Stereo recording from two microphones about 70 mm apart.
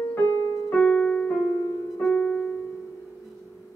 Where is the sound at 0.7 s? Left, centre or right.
Centre.